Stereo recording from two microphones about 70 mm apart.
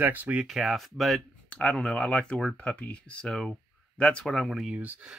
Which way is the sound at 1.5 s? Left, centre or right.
Centre.